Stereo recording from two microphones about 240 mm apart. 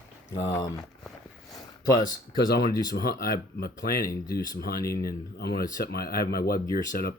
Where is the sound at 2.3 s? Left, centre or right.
Left.